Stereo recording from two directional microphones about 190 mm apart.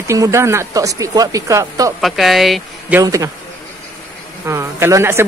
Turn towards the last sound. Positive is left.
turn(degrees=-15)  # may be behind; listen again after turning